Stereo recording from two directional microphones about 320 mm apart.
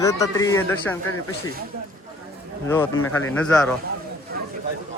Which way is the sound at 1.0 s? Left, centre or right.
Left.